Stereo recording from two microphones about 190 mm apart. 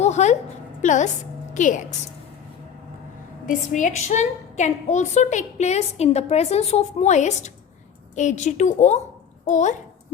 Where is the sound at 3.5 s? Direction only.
40° left (ahead or behind).